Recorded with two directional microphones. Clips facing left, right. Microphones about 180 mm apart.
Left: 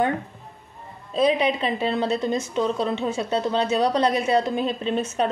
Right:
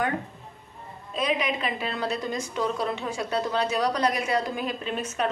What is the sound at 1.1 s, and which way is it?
A woman's voice, 30° left (ahead or behind).